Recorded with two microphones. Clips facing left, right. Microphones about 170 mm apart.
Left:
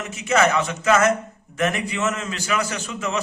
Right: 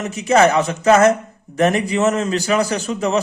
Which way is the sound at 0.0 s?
35° right (ahead or behind).